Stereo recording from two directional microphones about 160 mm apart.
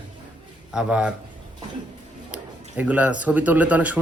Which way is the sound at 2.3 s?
10° right (ahead or behind).